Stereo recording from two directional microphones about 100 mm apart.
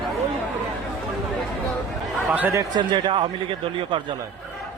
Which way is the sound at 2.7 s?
55° right (ahead or behind).